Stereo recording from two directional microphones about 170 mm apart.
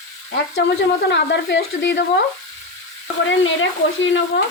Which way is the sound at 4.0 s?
90° left.